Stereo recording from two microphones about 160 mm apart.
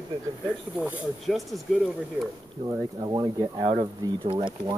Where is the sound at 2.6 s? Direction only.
25° right (ahead or behind).